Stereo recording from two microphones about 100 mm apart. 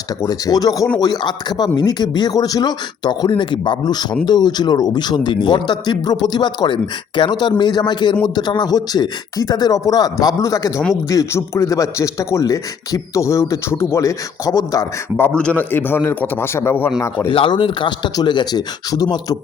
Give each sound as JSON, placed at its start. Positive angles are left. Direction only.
{"t": 0.2, "sound": "speech", "side_deg": 40}
{"t": 15.2, "sound": "a man's voice", "side_deg": 15}
{"t": 17.2, "sound": "speech", "side_deg": 60}